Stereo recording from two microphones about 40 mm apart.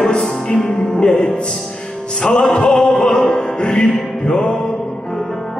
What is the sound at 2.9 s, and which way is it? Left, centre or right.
Music, centre.